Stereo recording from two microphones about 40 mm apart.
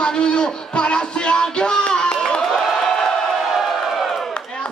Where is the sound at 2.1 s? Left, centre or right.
Centre.